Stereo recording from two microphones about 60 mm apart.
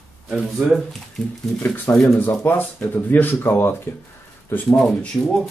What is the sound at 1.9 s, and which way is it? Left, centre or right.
Speech, left.